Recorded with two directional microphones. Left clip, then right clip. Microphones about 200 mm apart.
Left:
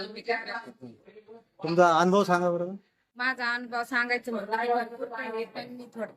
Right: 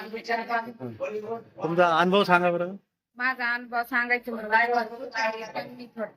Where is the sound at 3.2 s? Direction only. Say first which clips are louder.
Right 2 dB; 30° left (ahead or behind).